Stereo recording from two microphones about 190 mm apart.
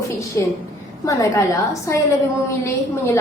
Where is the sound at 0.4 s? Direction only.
15° left (ahead or behind).